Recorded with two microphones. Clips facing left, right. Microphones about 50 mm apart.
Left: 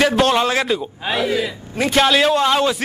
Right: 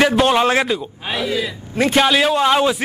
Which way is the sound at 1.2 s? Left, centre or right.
Left.